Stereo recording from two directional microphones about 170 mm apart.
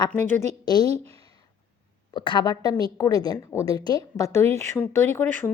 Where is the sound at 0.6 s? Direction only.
25° left (ahead or behind).